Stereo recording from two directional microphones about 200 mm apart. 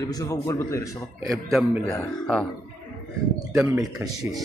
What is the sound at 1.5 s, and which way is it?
Speech, centre (ahead or behind).